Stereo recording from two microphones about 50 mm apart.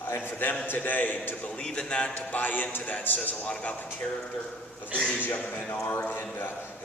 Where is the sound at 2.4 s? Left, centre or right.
Left.